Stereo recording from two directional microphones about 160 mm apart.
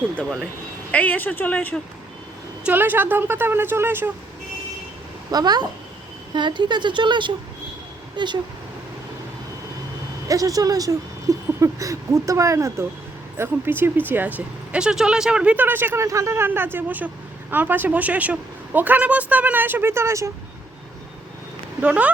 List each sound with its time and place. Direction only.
0.9 s speech: 10° left (ahead or behind)
2.6 s speech: 10° right (ahead or behind)
5.3 s speech: 25° right (ahead or behind)
10.2 s speech: 20° right (ahead or behind)
21.8 s speech: 10° right (ahead or behind)